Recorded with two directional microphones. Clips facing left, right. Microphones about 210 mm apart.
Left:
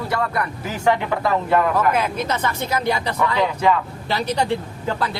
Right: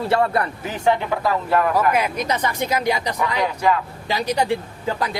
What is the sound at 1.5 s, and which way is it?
Speech, 10° right (ahead or behind).